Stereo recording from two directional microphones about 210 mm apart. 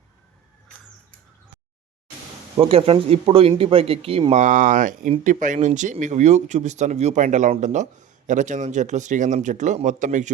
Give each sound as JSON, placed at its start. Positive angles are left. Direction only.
{"t": 2.6, "sound": "speech", "side_deg": -25}